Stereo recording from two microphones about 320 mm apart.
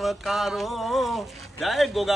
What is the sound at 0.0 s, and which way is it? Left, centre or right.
Speech, centre.